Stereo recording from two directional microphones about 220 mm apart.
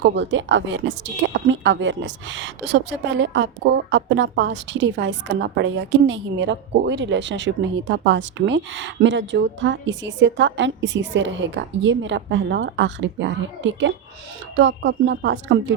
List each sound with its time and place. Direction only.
0.0 s speech: 55° right (ahead or behind)